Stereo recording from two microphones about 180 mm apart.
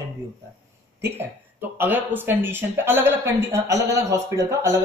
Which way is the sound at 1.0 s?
10° right (ahead or behind).